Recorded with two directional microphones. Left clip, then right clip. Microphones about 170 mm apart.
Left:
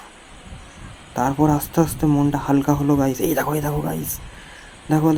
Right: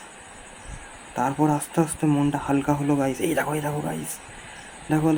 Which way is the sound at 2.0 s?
5° left (ahead or behind).